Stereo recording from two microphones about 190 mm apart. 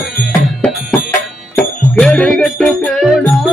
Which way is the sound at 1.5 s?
5° left (ahead or behind).